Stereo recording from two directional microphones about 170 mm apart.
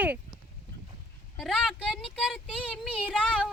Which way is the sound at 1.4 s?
Centre (ahead or behind).